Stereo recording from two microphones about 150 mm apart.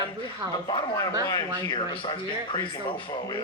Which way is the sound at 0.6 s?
25° left (ahead or behind).